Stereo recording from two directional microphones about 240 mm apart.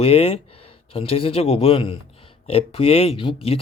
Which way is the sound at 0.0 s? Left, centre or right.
Left.